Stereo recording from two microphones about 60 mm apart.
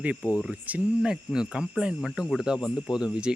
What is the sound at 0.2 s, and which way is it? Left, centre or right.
Speech, right.